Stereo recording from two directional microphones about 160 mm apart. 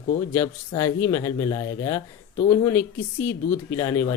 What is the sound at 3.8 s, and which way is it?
Speech, 20° left (ahead or behind).